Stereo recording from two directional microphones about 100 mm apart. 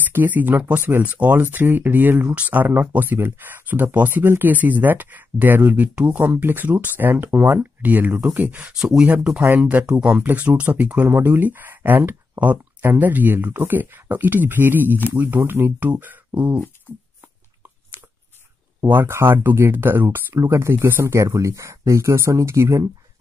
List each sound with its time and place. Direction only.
0.1 s speech: 20° right (ahead or behind)
8.7 s speech: 5° right (ahead or behind); by 16.6 s 20° right (ahead or behind)
18.8 s speech: 20° right (ahead or behind)